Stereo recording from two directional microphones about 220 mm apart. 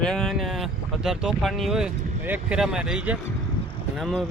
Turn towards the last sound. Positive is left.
turn(degrees=0)  # may be behind; listen again after turning